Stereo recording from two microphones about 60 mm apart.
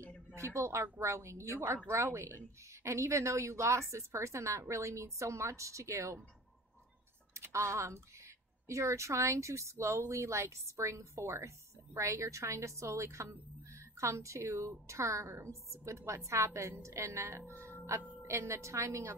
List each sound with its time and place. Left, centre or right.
0.4 s speech: right
7.4 s speech: right
17.5 s music: right
18.2 s speech: right